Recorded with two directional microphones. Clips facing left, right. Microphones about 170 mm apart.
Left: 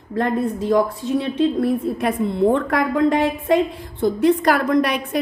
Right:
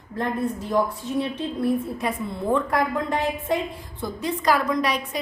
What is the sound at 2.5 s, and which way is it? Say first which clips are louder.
A woman's voice: left 4 dB; 90° left.